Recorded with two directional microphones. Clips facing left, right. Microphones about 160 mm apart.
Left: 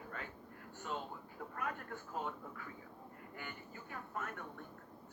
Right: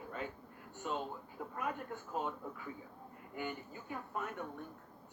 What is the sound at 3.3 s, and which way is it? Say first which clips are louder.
Speech: right 9 dB; 20° right (ahead or behind).